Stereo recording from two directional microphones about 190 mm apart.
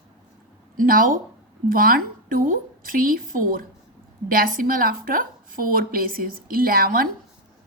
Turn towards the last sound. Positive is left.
turn(degrees=-50)  # may be behind; listen again after turning